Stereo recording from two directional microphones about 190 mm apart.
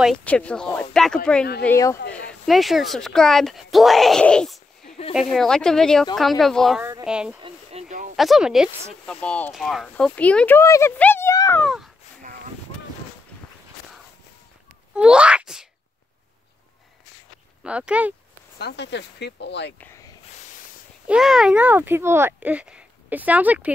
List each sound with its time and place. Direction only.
0.0 s speech: 5° left (ahead or behind)
2.2 s speech: centre (ahead or behind)
4.8 s a sound: 35° left (ahead or behind)
5.1 s speech: centre (ahead or behind)
6.8 s speech: 15° right (ahead or behind)
7.1 s speech: 5° right (ahead or behind)
7.4 s a sound: 35° right (ahead or behind)
8.2 s speech: centre (ahead or behind); by 11.6 s 15° left (ahead or behind)
11.6 s speech: centre (ahead or behind)
15.0 s a child's voice: 5° right (ahead or behind)
17.6 s speech: 5° right (ahead or behind)
18.6 s speech: 60° left (ahead or behind)
21.1 s speech: centre (ahead or behind)